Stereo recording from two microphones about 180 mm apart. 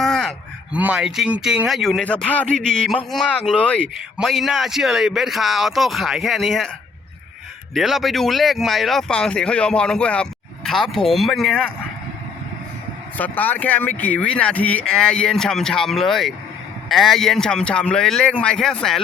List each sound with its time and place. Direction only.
0.0 s a sound: centre (ahead or behind)
0.8 s speech: 5° right (ahead or behind)
7.7 s speech: centre (ahead or behind)
13.1 s speech: 10° left (ahead or behind)